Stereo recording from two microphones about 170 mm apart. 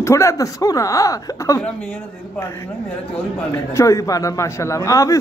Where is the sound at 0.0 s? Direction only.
15° left (ahead or behind).